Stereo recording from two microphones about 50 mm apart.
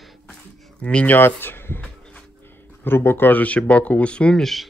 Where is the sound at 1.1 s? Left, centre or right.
Left.